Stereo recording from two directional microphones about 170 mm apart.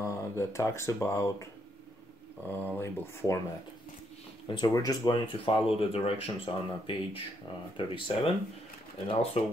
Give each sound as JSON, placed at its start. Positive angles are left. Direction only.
{"t": 0.0, "sound": "speech", "side_deg": 15}
{"t": 2.5, "sound": "speech", "side_deg": 15}
{"t": 4.5, "sound": "speech", "side_deg": 25}